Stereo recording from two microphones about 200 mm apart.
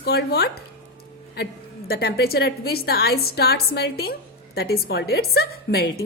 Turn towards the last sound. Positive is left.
turn(degrees=50)  # may be behind; listen again after turning